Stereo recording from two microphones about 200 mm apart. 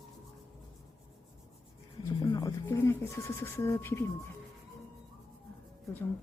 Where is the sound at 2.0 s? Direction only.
20° left (ahead or behind).